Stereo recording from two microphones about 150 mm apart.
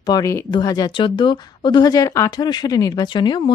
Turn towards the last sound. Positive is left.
turn(degrees=30)  # may be behind; listen again after turning